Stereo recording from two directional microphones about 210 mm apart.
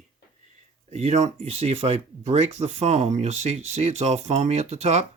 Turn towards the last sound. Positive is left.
turn(degrees=-30)  # may be behind; listen again after turning